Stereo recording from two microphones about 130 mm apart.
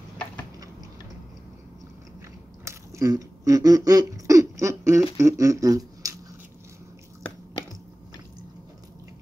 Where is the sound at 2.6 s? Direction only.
25° right (ahead or behind).